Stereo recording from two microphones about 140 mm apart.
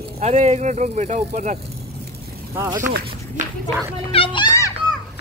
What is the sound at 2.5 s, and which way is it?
Speech, 20° right (ahead or behind).